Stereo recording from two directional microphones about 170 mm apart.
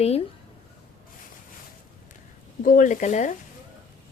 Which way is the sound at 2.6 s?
50° left (ahead or behind).